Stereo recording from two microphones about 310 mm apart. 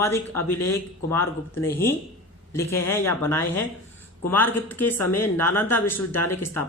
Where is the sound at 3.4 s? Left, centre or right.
Left.